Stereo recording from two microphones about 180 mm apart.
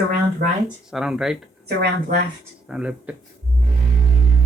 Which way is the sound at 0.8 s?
5° right (ahead or behind).